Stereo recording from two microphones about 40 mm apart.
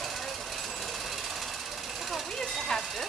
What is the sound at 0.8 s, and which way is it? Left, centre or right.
Jackhammer, centre.